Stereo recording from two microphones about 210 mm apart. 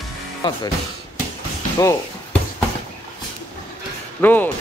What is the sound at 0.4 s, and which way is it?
Speech, 20° left (ahead or behind).